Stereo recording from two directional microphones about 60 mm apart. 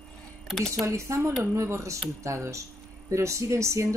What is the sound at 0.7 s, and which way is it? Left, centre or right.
Speech, right.